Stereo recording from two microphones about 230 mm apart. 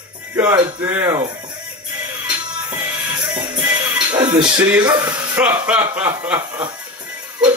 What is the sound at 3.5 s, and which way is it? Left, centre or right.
Music, centre.